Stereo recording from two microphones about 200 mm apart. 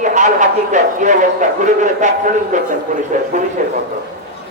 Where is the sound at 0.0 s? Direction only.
40° right (ahead or behind).